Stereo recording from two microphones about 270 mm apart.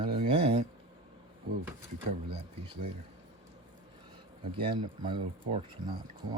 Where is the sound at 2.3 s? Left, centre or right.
Centre.